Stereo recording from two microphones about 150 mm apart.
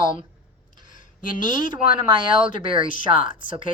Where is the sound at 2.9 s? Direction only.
60° left (ahead or behind).